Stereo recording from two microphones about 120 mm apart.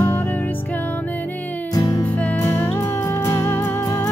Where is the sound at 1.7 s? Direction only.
25° left (ahead or behind).